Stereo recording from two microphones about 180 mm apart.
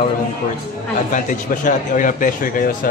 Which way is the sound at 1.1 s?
45° left (ahead or behind).